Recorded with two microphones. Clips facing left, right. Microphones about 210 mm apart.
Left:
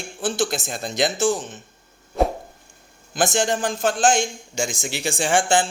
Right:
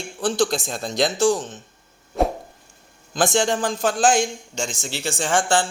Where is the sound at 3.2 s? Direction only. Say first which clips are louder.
Right 1 dB; centre (ahead or behind).